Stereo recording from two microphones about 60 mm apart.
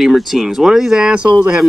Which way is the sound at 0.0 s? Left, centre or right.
Centre.